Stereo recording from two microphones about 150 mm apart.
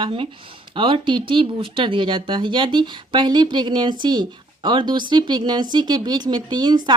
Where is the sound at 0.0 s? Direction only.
35° right (ahead or behind).